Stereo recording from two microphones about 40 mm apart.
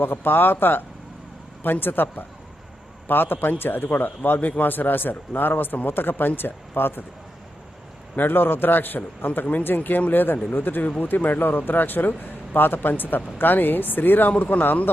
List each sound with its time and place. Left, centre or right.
0.0 s speech: left
4.4 s speech: left
8.1 s speech: left